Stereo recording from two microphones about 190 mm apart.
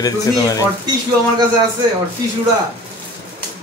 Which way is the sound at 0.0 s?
20° left (ahead or behind).